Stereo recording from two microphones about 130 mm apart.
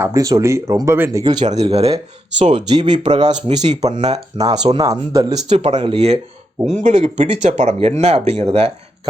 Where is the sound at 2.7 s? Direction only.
40° right (ahead or behind).